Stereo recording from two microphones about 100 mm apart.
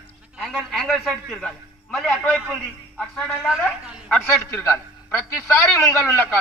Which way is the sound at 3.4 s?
Centre (ahead or behind).